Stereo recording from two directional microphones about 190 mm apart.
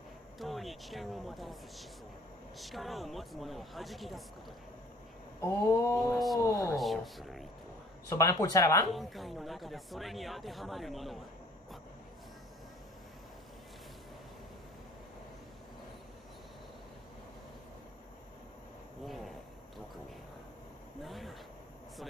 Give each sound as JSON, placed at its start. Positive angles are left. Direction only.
{"t": 0.4, "sound": "speech", "side_deg": 0}
{"t": 5.4, "sound": "speech", "side_deg": 15}
{"t": 6.1, "sound": "speech", "side_deg": 0}
{"t": 6.4, "sound": "speech", "side_deg": 20}
{"t": 6.7, "sound": "speech", "side_deg": 0}
{"t": 8.1, "sound": "speech", "side_deg": 15}
{"t": 8.9, "sound": "speech", "side_deg": 0}
{"t": 21.0, "sound": "a sound", "side_deg": 0}